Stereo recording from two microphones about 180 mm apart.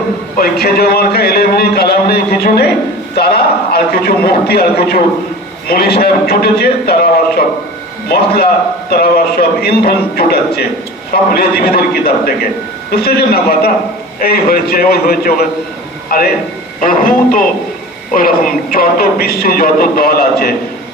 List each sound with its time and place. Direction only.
0.3 s a man's voice: 60° left (ahead or behind)